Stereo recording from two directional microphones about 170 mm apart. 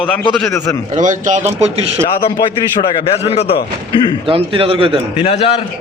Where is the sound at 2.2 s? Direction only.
25° left (ahead or behind).